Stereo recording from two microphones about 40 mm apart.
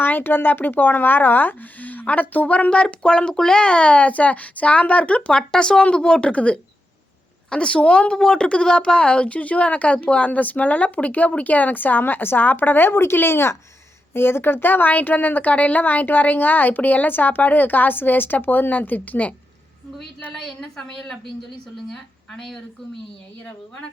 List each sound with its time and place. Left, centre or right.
0.0 s speech: left
5.4 s speech: centre; by 19.3 s left
20.8 s speech: centre
22.4 s speech: centre